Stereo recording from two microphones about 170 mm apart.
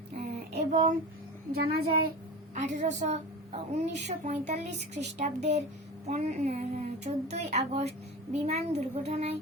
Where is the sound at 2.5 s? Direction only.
45° right (ahead or behind).